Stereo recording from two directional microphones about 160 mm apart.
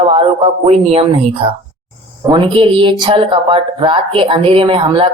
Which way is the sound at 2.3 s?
35° right (ahead or behind).